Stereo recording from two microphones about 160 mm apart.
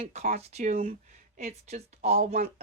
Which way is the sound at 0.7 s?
55° right (ahead or behind).